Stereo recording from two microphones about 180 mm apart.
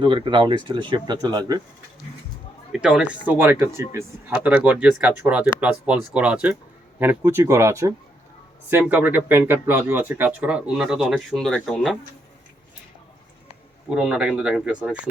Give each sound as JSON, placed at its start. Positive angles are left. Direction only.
{"t": 0.0, "sound": "speech", "side_deg": -25}
{"t": 2.7, "sound": "speech", "side_deg": -5}
{"t": 13.9, "sound": "speech", "side_deg": -5}